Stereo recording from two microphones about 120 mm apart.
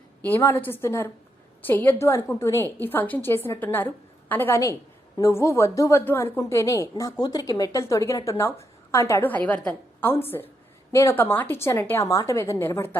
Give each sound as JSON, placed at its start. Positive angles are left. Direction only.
{"t": 0.2, "sound": "a woman's voice", "side_deg": 15}